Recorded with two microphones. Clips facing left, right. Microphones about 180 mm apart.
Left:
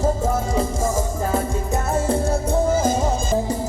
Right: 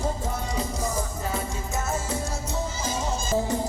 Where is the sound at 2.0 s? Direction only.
55° left (ahead or behind).